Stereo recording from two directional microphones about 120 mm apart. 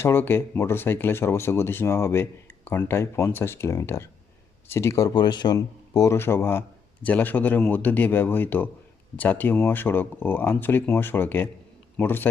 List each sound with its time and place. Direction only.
0.0 s speech: 20° left (ahead or behind)